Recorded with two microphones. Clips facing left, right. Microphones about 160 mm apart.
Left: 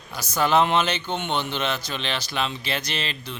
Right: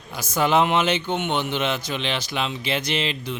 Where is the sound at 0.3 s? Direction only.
15° right (ahead or behind).